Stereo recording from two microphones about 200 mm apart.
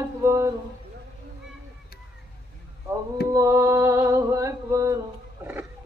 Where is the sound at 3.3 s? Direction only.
15° right (ahead or behind).